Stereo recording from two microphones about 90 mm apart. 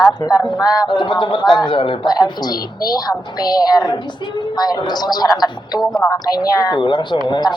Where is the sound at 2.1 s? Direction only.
50° left (ahead or behind).